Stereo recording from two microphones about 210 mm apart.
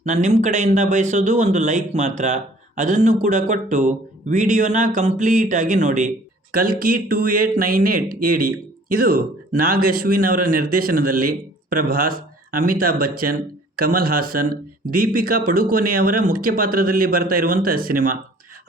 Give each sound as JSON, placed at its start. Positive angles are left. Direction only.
{"t": 0.0, "sound": "a man's voice", "side_deg": -35}